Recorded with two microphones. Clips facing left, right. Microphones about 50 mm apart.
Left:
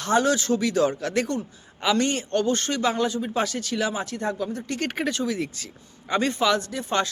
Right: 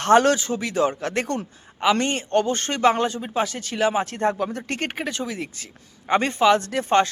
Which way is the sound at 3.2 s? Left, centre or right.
Centre.